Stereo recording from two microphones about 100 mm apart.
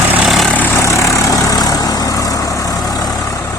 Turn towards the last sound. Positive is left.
turn(degrees=35)  # may be behind; listen again after turning